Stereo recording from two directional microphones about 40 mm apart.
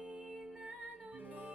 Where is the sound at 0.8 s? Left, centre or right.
Right.